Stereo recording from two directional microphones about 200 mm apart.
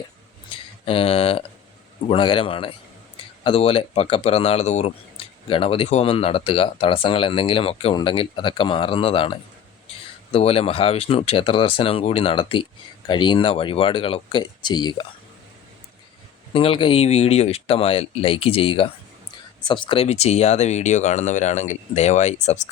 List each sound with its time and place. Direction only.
0.5 s speech: 30° left (ahead or behind)
16.5 s speech: 25° left (ahead or behind)